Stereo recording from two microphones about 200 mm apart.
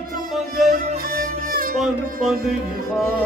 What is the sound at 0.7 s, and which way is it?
Music, 45° right (ahead or behind).